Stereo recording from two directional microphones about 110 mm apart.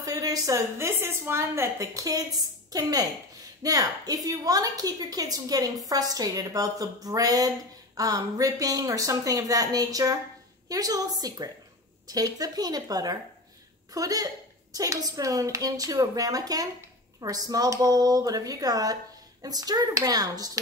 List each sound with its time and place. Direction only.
0.0 s a woman's voice: 35° right (ahead or behind)